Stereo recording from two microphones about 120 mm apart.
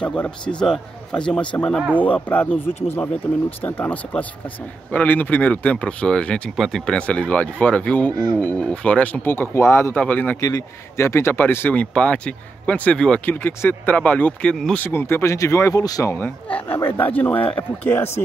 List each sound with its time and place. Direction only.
0.0 s speech: 10° left (ahead or behind)
10.4 s speech: 25° left (ahead or behind); by 14.9 s 5° left (ahead or behind)
14.9 s speech: 20° left (ahead or behind)
16.1 s speech: 15° left (ahead or behind)